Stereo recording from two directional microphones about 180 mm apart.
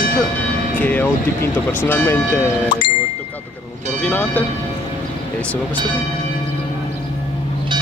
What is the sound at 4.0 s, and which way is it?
Speech, 10° left (ahead or behind).